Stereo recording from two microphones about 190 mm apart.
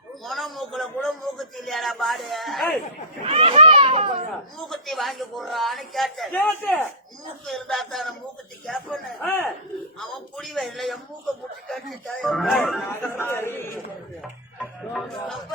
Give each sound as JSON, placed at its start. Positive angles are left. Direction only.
{"t": 0.3, "sound": "a sound", "side_deg": 0}
{"t": 3.2, "sound": "children playing", "side_deg": -30}
{"t": 4.5, "sound": "a woman's voice", "side_deg": 0}
{"t": 12.9, "sound": "a man's voice", "side_deg": 10}
{"t": 15.2, "sound": "a woman's voice", "side_deg": 0}